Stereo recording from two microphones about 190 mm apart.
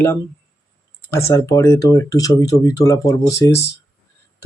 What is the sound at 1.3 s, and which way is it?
Speech, 15° left (ahead or behind).